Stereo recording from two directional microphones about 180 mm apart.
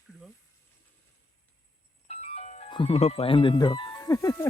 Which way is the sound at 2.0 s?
35° left (ahead or behind).